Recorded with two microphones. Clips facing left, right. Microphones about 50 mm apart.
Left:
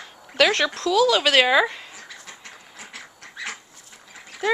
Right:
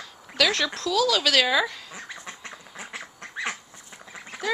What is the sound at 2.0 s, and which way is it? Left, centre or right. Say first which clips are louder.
Duck: right 3 dB; right.